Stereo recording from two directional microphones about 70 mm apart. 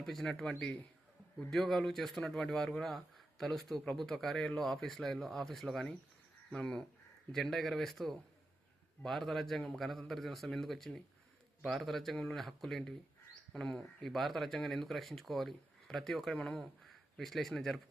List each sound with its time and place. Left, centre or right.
0.0 s a man's voice: centre